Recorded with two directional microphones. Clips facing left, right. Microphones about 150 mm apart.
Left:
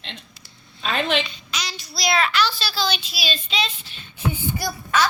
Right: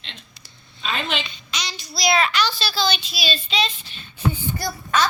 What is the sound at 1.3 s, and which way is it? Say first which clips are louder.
A child's voice: even; 5° left (ahead or behind).